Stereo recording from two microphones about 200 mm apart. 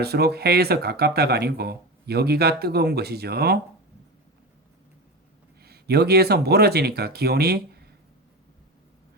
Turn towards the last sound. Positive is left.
turn(degrees=-50)  # may be behind; listen again after turning